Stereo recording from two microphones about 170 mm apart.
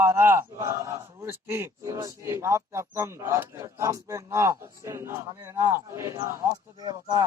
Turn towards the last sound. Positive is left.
turn(degrees=-25)  # may be behind; listen again after turning